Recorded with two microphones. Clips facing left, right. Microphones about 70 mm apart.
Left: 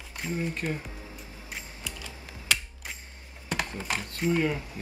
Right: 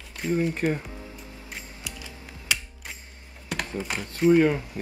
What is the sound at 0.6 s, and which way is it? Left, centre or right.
Speech, right.